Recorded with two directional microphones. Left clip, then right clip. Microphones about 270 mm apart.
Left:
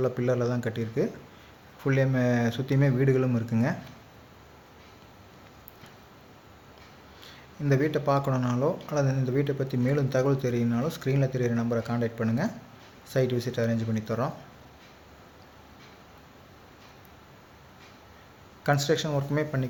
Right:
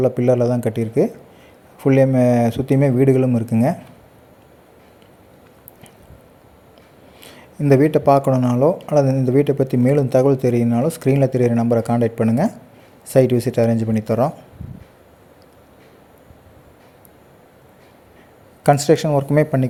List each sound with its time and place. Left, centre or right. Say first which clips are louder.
0.0 s speech: right 11 dB; right
7.6 s speech: right 12 dB; right
18.6 s speech: right 11 dB; right